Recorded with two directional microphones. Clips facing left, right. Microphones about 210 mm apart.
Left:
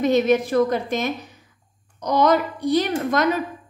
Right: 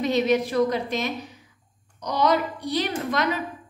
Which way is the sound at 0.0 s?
50° left (ahead or behind).